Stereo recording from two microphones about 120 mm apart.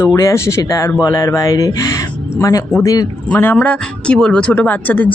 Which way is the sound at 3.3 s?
15° left (ahead or behind).